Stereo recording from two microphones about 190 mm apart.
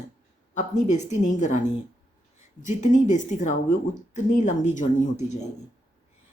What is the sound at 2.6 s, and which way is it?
Speech, 40° left (ahead or behind).